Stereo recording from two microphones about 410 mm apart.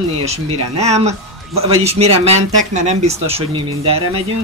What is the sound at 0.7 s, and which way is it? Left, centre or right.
Speech, centre.